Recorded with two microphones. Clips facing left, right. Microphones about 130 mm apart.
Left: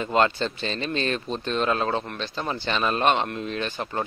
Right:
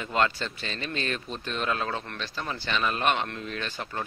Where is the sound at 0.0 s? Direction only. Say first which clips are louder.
Left 5 dB; 25° left (ahead or behind).